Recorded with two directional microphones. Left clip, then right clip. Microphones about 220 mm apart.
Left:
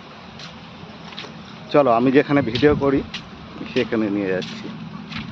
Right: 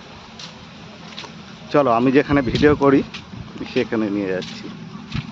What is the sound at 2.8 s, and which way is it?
Speech, 50° right (ahead or behind).